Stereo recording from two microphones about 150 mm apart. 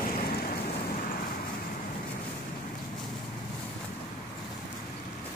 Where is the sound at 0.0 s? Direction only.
75° left (ahead or behind).